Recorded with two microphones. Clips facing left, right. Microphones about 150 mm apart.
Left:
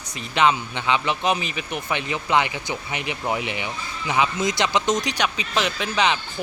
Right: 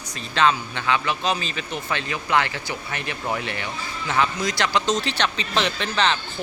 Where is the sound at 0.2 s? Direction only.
15° left (ahead or behind).